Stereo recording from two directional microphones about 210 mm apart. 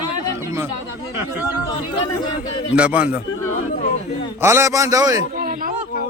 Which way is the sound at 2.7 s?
5° right (ahead or behind).